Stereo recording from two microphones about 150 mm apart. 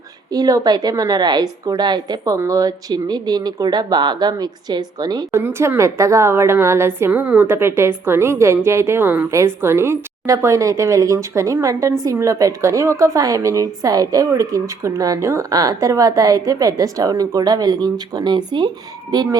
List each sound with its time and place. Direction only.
0.3 s a woman's voice: 25° right (ahead or behind)
5.3 s a woman's voice: 15° right (ahead or behind)